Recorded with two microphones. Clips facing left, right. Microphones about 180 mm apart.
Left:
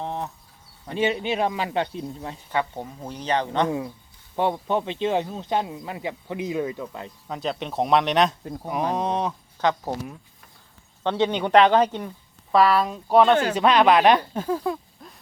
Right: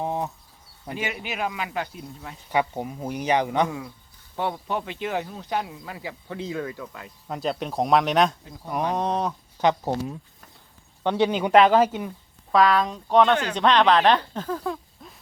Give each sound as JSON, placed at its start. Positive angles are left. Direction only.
{"t": 0.0, "sound": "a sound", "side_deg": -15}
{"t": 0.9, "sound": "speech", "side_deg": 30}
{"t": 2.5, "sound": "speech", "side_deg": -15}
{"t": 3.7, "sound": "speech", "side_deg": 25}
{"t": 7.3, "sound": "speech", "side_deg": 0}
{"t": 9.6, "sound": "speech", "side_deg": -20}
{"t": 11.0, "sound": "speech", "side_deg": -10}
{"t": 12.5, "sound": "speech", "side_deg": 5}